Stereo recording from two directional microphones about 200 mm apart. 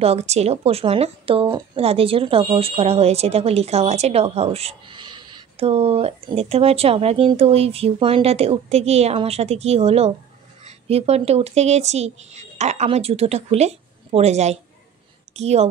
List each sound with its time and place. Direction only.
0.0 s a woman's voice: 30° right (ahead or behind)